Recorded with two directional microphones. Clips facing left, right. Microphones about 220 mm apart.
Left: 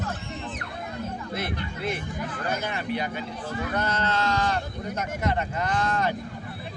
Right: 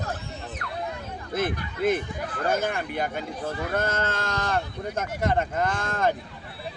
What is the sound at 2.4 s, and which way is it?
Speech, 50° right (ahead or behind).